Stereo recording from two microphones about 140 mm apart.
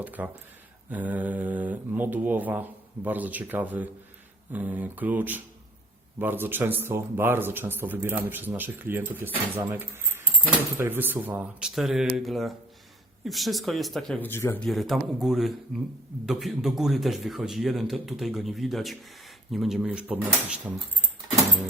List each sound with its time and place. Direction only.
0.0 s a man's voice: 10° right (ahead or behind)
14.2 s speech: 15° left (ahead or behind)
14.6 s a man's voice: centre (ahead or behind)